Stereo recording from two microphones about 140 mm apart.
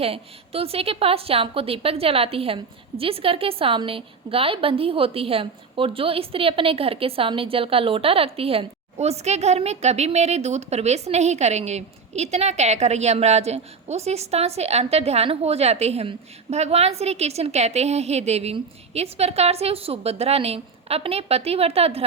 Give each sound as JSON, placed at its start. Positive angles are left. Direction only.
{"t": 0.0, "sound": "a woman's voice", "side_deg": -45}